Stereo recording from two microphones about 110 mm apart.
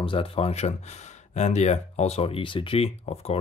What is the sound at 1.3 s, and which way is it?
Speech, 90° left.